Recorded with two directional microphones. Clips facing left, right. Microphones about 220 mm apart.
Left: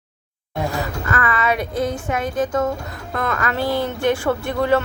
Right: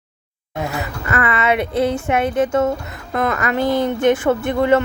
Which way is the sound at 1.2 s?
25° right (ahead or behind).